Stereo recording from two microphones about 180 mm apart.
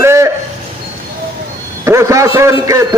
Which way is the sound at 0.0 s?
15° right (ahead or behind).